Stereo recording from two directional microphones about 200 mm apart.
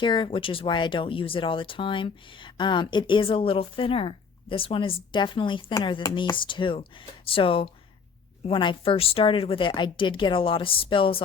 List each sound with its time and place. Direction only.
0.0 s speech: 25° left (ahead or behind)